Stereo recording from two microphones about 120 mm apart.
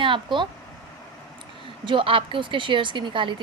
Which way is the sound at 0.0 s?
40° right (ahead or behind).